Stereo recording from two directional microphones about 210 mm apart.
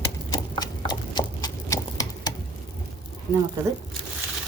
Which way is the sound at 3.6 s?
15° right (ahead or behind).